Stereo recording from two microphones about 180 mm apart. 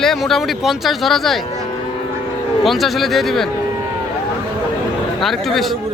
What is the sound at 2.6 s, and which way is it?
Speech, centre (ahead or behind).